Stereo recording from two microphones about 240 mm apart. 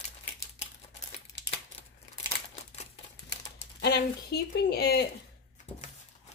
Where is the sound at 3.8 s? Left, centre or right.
Left.